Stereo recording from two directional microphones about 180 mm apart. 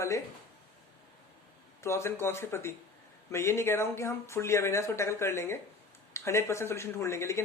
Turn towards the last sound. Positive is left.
turn(degrees=15)  # may be behind; listen again after turning